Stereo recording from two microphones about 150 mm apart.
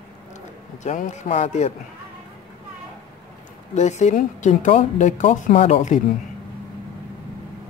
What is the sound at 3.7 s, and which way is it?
Speech, 50° left (ahead or behind).